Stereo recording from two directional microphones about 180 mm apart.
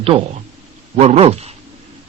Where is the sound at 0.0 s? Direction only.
30° right (ahead or behind).